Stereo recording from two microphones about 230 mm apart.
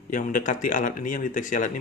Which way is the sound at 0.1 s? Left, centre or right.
Left.